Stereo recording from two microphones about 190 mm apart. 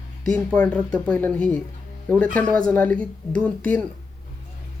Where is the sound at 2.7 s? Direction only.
5° left (ahead or behind).